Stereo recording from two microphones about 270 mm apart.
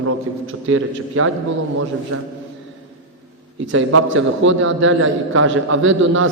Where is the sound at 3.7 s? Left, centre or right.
Right.